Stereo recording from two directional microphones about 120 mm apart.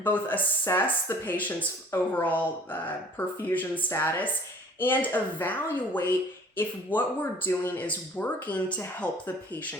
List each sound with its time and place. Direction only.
0.0 s speech: 15° left (ahead or behind)